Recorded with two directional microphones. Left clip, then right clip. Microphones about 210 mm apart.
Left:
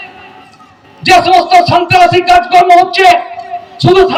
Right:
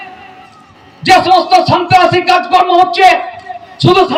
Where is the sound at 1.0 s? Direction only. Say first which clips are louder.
Left 1 dB; 30° left (ahead or behind).